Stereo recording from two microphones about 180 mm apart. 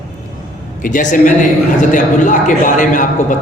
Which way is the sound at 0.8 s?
45° left (ahead or behind).